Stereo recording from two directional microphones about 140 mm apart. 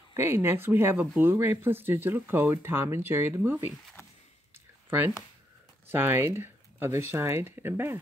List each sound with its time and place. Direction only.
0.1 s speech: 15° right (ahead or behind)
4.8 s a sound: 15° right (ahead or behind)
5.9 s speech: 15° right (ahead or behind)